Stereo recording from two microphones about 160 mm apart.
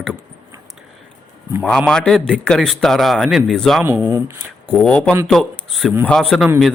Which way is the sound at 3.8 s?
15° right (ahead or behind).